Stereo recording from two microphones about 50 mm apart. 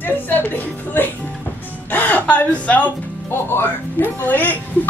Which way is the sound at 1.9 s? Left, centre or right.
Left.